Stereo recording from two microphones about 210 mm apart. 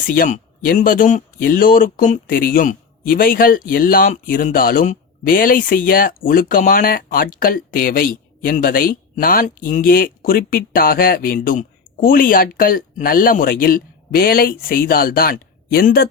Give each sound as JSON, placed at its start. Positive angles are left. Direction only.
{"t": 0.1, "sound": "speech", "side_deg": 45}